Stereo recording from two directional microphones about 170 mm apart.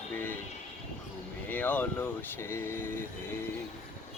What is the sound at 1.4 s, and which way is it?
Speech, 10° left (ahead or behind).